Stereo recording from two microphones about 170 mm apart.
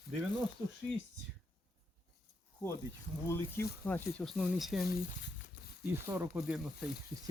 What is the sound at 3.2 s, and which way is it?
Speech, 15° left (ahead or behind).